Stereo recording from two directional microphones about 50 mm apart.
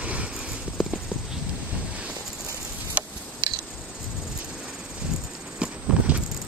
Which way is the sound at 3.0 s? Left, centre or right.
Right.